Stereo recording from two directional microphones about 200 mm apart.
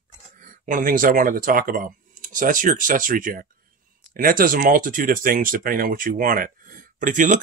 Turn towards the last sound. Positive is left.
turn(degrees=-40)  # may be behind; listen again after turning